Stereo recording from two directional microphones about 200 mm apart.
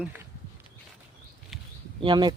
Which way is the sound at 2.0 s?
20° right (ahead or behind).